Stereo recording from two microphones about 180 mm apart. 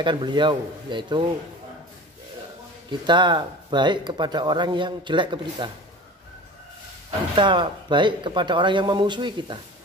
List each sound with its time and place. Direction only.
0.0 s speech: 25° right (ahead or behind)
2.9 s speech: 25° right (ahead or behind)
7.3 s speech: 25° right (ahead or behind)